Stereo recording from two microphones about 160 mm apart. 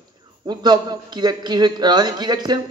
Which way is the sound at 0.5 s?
25° right (ahead or behind).